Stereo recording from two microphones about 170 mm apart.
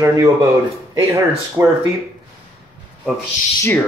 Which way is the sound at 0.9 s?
15° right (ahead or behind).